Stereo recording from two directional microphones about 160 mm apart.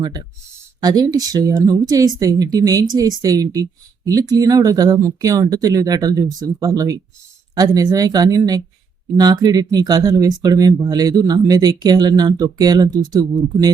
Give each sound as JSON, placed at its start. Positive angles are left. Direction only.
{"t": 0.0, "sound": "speech", "side_deg": -25}